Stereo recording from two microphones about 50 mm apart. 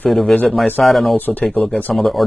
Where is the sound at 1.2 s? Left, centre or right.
Left.